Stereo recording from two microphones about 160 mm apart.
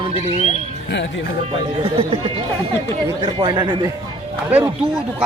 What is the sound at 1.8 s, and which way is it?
A man's voice, 35° right (ahead or behind).